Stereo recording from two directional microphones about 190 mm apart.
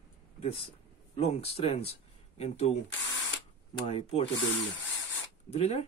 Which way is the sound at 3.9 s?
30° left (ahead or behind).